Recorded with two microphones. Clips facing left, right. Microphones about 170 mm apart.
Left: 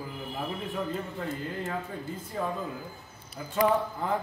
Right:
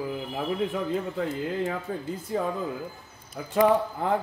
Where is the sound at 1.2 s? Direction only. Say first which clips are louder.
Right 6 dB; 90° right.